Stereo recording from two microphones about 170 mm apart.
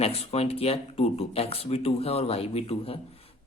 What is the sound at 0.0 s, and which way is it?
Speech, 35° left (ahead or behind).